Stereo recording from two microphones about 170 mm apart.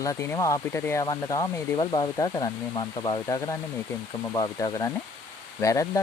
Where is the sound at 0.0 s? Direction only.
20° left (ahead or behind).